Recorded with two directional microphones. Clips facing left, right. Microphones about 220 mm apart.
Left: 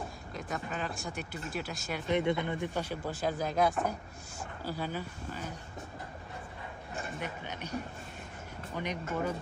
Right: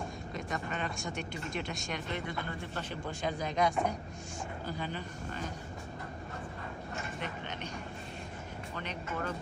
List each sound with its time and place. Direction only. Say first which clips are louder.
0.3 s speech: even; centre (ahead or behind)
2.0 s speech: left 13 dB; 20° left (ahead or behind)
7.2 s speech: even; 10° left (ahead or behind)
8.8 s speech: left 6 dB; 10° left (ahead or behind)